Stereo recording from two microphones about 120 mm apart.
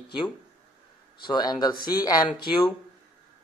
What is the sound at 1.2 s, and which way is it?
Speech, 35° left (ahead or behind).